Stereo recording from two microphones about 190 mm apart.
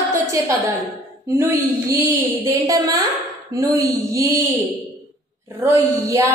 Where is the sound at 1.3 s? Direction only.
15° right (ahead or behind).